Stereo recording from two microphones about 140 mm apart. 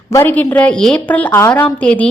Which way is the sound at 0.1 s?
15° left (ahead or behind).